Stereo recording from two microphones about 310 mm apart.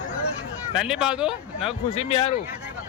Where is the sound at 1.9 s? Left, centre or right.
Centre.